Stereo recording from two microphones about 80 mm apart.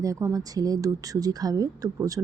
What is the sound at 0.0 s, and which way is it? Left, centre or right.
A woman's voice, right.